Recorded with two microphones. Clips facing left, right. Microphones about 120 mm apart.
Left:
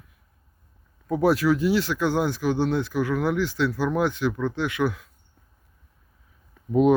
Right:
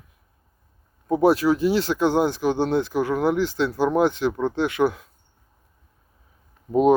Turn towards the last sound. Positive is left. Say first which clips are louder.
# right 2 dB
turn(degrees=-30)  # may be behind; listen again after turning